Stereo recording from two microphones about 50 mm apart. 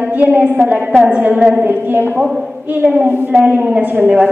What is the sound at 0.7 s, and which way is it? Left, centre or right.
Speech, centre.